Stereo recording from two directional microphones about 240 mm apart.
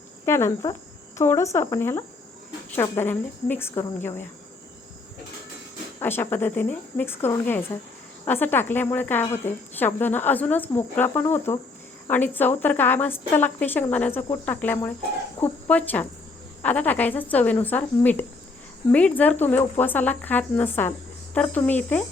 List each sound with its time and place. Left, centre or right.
0.3 s speech: centre
6.0 s speech: centre